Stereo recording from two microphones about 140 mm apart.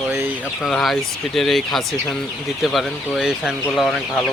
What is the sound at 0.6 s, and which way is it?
Speech, centre (ahead or behind).